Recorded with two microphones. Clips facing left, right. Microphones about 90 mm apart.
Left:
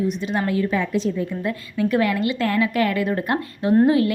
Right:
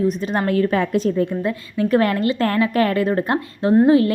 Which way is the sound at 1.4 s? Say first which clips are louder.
Right 2 dB; 35° right (ahead or behind).